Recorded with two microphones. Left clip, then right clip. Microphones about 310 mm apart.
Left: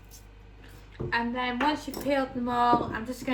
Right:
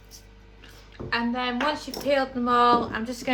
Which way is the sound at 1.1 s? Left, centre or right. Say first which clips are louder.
Right 2 dB; centre.